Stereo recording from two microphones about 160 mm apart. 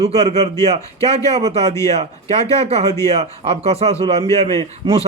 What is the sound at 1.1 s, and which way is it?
A man's voice, 40° right (ahead or behind).